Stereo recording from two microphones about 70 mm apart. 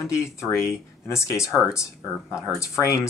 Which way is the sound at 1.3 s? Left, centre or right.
Centre.